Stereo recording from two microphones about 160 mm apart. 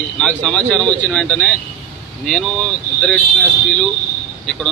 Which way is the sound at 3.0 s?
5° left (ahead or behind).